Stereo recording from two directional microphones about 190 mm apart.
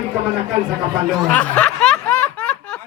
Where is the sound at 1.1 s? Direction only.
5° left (ahead or behind).